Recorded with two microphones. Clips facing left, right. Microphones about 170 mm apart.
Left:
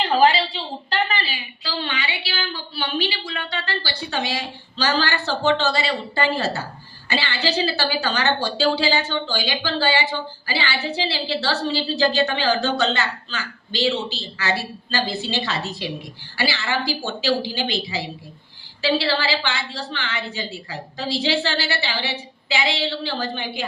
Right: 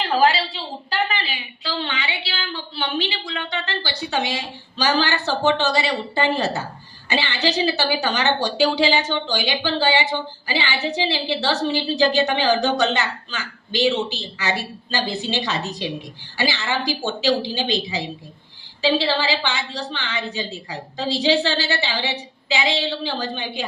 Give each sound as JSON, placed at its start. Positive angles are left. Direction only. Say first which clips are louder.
{"t": 0.0, "sound": "speech", "louder": "left 1 dB", "side_deg": -5}